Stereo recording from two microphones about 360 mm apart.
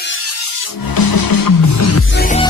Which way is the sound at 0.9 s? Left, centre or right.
Left.